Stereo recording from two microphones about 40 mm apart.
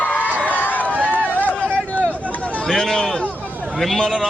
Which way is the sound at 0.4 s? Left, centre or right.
Left.